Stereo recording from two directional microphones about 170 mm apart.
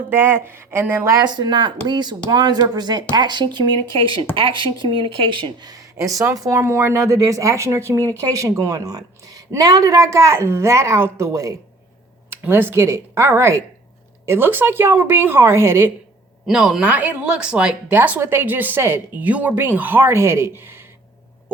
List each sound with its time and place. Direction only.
0.1 s speech: 10° right (ahead or behind)
16.5 s speech: 5° right (ahead or behind)